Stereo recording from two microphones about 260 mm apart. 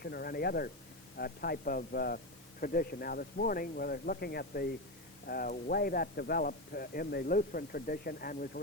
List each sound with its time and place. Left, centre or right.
0.0 s speech: left